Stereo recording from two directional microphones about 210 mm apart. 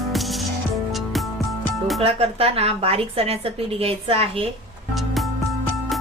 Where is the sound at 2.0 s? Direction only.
30° right (ahead or behind).